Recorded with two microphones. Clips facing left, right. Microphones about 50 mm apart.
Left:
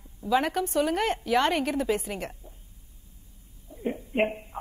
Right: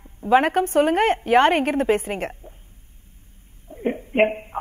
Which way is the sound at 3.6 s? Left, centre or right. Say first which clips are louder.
Right 6 dB; right.